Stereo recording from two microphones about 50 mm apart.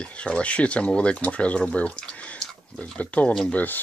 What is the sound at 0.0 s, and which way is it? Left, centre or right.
Speech, left.